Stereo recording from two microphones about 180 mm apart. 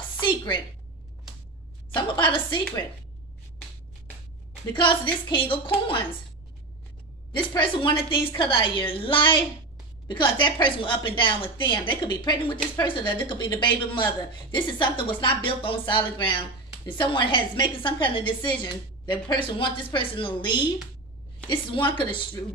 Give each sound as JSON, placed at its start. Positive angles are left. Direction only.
{"t": 0.2, "sound": "a woman's voice", "side_deg": 25}
{"t": 2.0, "sound": "speech", "side_deg": 25}
{"t": 4.7, "sound": "speech", "side_deg": 25}
{"t": 7.3, "sound": "speech", "side_deg": 25}